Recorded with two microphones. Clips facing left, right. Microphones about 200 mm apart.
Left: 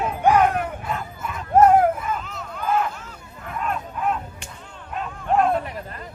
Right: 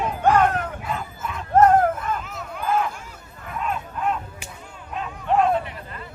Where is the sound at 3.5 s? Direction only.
Centre (ahead or behind).